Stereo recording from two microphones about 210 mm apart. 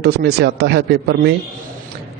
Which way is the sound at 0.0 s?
50° right (ahead or behind).